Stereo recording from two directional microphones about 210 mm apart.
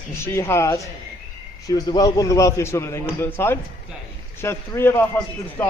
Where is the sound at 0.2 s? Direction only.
10° left (ahead or behind).